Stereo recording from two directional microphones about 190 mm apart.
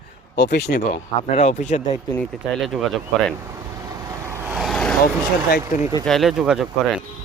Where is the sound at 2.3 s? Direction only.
Centre (ahead or behind).